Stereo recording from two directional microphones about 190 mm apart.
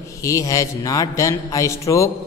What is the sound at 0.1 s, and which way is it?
A man's voice, 15° left (ahead or behind).